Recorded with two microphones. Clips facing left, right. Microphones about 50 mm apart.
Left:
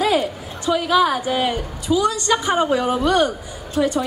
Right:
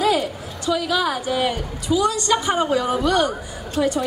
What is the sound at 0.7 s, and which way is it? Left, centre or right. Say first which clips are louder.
Speech: left 4 dB; left.